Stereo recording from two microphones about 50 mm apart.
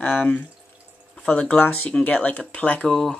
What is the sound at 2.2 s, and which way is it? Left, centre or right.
Speech, left.